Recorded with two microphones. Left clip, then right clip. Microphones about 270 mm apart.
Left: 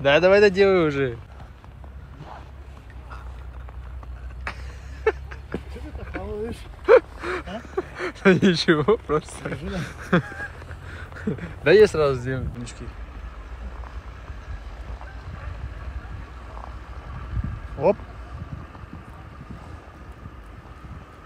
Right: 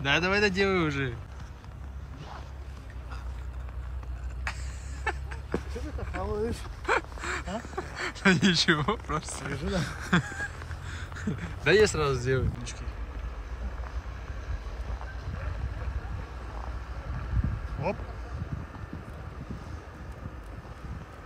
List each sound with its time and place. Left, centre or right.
0.0 s speech: centre
4.5 s a sound: centre
6.1 s speech: centre